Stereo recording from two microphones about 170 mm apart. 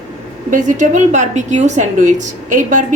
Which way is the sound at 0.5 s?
45° right (ahead or behind).